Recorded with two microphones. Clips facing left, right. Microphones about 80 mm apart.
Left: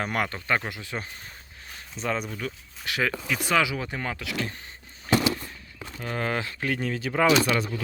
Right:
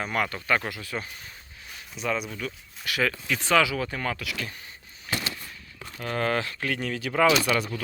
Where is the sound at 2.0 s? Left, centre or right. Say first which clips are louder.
Even; left.